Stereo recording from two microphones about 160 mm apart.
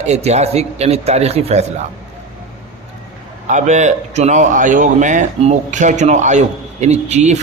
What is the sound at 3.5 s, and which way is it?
A man's voice, 45° right (ahead or behind).